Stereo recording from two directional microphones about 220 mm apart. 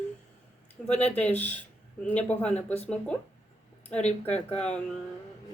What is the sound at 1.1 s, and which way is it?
Speech, 5° left (ahead or behind).